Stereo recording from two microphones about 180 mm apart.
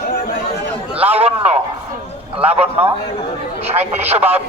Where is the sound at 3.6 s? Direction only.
35° right (ahead or behind).